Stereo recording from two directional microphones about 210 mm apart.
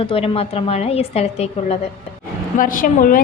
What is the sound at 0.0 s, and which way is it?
A woman's voice, 25° left (ahead or behind).